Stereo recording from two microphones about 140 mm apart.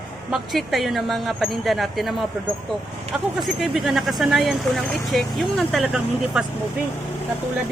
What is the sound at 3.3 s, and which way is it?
Speech, centre (ahead or behind).